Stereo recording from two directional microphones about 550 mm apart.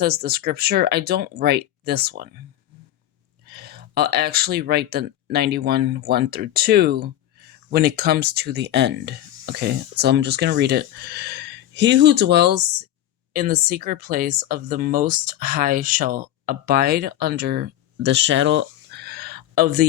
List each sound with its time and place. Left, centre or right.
0.0 s speech: centre
3.4 s speech: centre